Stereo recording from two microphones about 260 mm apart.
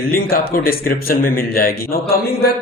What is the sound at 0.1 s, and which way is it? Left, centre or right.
A man's voice, left.